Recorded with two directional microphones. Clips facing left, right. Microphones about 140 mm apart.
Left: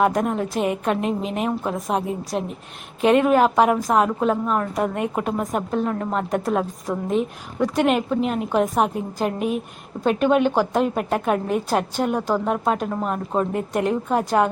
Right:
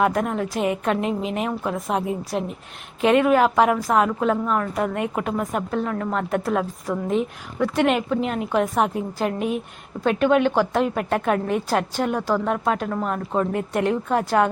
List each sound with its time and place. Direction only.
0.0 s a woman's voice: 20° left (ahead or behind)
3.1 s a woman's voice: 20° left (ahead or behind)